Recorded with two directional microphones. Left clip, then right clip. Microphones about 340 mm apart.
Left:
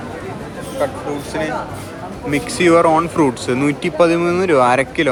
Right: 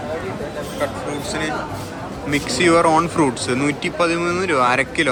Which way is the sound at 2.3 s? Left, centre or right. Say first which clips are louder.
Left 3 dB; centre.